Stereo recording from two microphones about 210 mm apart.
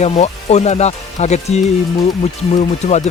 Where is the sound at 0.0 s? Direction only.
30° left (ahead or behind).